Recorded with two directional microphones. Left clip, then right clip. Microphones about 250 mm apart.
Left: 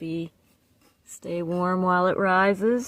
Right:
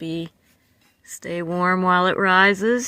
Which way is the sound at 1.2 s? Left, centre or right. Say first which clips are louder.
Right 4 dB; right.